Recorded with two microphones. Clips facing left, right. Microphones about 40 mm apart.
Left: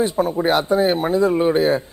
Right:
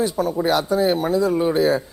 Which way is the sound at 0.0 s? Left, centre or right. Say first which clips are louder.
Left 2 dB; left.